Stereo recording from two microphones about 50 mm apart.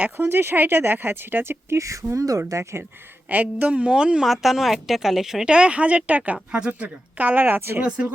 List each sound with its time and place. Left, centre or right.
0.3 s speech: right
1.7 s speech: right
2.5 s speech: right
3.2 s a woman's voice: right; by 4.3 s centre
4.3 s speech: centre
5.5 s a woman's voice: right
7.4 s speech: right
7.8 s a woman's voice: right